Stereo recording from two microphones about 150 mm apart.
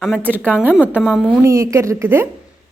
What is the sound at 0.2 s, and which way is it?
A woman's voice, 10° right (ahead or behind).